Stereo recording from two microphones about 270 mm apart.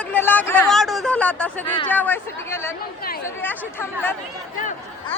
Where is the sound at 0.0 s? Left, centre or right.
Centre.